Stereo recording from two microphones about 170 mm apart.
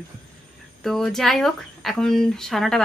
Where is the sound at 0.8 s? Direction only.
Centre (ahead or behind).